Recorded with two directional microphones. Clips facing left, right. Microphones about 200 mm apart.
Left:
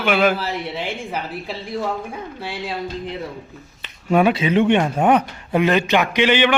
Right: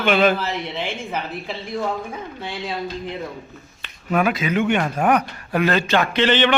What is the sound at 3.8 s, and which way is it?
A man's voice, 30° left (ahead or behind).